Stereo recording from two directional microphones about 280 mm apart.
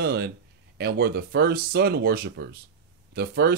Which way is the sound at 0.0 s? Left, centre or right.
Right.